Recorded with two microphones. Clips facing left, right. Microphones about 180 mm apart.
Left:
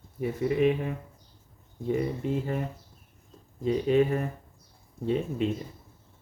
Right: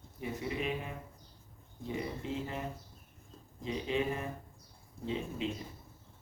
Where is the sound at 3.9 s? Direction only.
50° left (ahead or behind).